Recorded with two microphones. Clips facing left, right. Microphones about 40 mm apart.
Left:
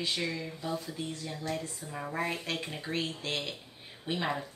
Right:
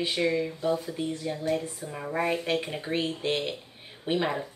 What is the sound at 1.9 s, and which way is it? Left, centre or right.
A woman's voice, centre.